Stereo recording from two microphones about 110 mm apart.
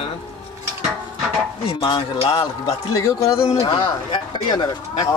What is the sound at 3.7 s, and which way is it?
Speech, 45° left (ahead or behind).